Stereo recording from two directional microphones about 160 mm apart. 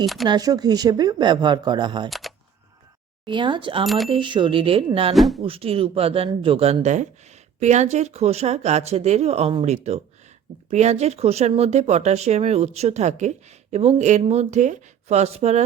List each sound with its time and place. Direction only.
0.0 s speech: centre (ahead or behind)
0.3 s speech: 25° right (ahead or behind)
2.0 s camera: centre (ahead or behind)
3.2 s speech: 30° right (ahead or behind)
3.8 s speech: centre (ahead or behind)
4.1 s speech: 30° right (ahead or behind)
5.1 s speech: centre (ahead or behind)
5.4 s speech: 35° right (ahead or behind)